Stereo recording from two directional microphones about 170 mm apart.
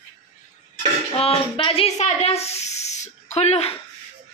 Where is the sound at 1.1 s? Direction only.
35° left (ahead or behind).